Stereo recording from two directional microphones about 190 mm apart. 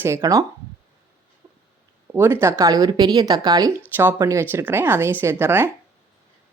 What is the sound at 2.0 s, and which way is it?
A woman's voice, 10° right (ahead or behind).